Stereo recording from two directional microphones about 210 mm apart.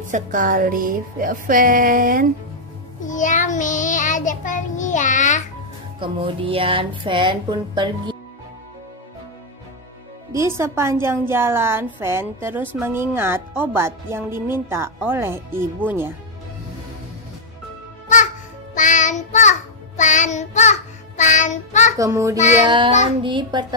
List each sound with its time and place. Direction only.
0.1 s music: 40° right (ahead or behind)
3.0 s child singing: 35° left (ahead or behind)
5.9 s speech: 25° right (ahead or behind)
10.3 s speech: 15° right (ahead or behind)
18.0 s music: 35° left (ahead or behind)
21.9 s speech: 15° right (ahead or behind)